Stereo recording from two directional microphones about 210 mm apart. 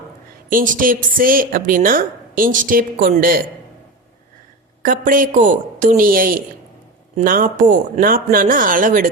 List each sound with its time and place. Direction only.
0.5 s a woman's voice: 40° right (ahead or behind)
4.8 s a woman's voice: 40° right (ahead or behind)